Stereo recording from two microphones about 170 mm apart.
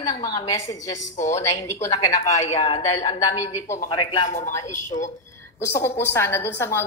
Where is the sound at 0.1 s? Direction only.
25° left (ahead or behind).